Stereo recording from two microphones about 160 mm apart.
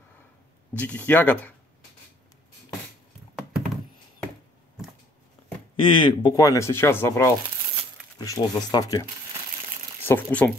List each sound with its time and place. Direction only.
0.7 s speech: 10° left (ahead or behind)
5.8 s speech: 30° left (ahead or behind)
10.0 s speech: 15° left (ahead or behind)